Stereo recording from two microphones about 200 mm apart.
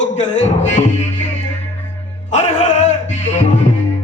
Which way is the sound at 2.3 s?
35° left (ahead or behind).